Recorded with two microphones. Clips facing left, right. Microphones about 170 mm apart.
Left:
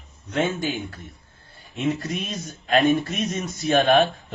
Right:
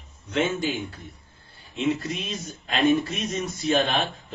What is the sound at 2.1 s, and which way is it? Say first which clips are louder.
Speech: left 2 dB; 50° left (ahead or behind).